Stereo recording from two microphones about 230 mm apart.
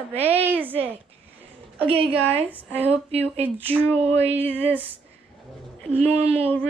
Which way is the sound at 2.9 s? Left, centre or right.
Right.